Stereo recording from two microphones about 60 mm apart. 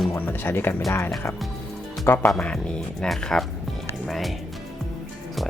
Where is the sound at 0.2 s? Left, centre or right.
Left.